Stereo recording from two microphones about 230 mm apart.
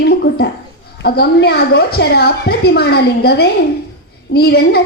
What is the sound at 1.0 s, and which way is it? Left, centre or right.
A woman's voice, left.